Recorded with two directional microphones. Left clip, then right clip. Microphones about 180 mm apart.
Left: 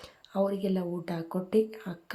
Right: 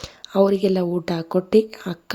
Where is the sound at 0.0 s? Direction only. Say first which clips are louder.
Right 11 dB; 40° right (ahead or behind).